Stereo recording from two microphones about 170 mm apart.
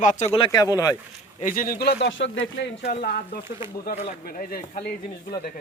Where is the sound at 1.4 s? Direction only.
50° left (ahead or behind); by 2.9 s 90° left.